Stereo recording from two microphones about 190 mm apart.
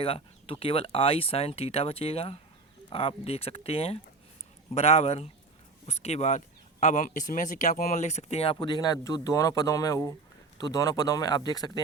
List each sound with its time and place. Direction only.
0.0 s speech: 30° left (ahead or behind)